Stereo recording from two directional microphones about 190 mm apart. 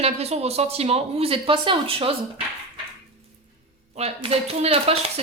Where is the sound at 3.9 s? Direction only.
35° right (ahead or behind).